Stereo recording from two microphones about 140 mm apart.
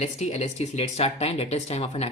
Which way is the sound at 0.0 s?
50° left (ahead or behind).